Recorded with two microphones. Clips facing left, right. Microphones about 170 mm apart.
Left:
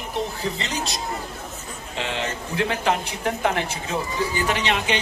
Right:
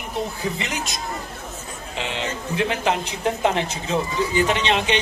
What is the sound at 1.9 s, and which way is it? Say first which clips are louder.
Speech: even; 15° right (ahead or behind).